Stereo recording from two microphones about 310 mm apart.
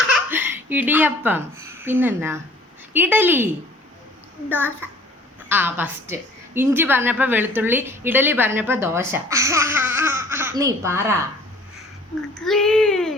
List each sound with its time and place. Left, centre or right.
0.1 s a woman's voice: centre
12.3 s speech: centre